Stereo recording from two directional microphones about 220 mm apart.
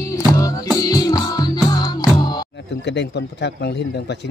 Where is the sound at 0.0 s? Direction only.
15° left (ahead or behind).